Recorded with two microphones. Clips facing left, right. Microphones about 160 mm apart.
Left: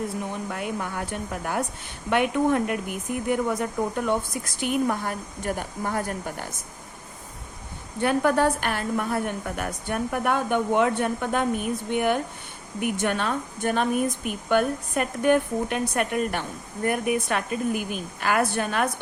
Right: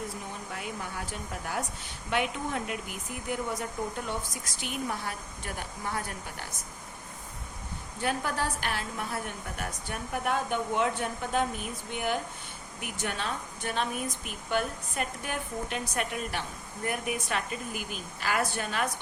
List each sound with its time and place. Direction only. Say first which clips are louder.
0.5 s a woman's voice: left 4 dB; 60° left (ahead or behind)
8.0 s a woman's voice: left 10 dB; 60° left (ahead or behind)